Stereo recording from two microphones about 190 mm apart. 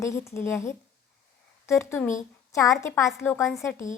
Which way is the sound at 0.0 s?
15° left (ahead or behind).